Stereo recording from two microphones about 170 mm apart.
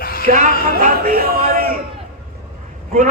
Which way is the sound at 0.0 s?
60° left (ahead or behind).